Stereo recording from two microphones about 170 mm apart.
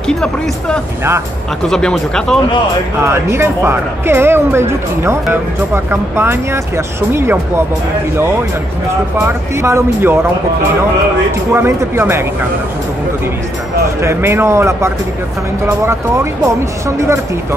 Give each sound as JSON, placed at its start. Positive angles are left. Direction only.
{"t": 0.1, "sound": "speech", "side_deg": 5}
{"t": 3.0, "sound": "speech", "side_deg": -15}
{"t": 9.6, "sound": "speech", "side_deg": -15}
{"t": 11.5, "sound": "speech", "side_deg": -15}
{"t": 14.0, "sound": "speech", "side_deg": -15}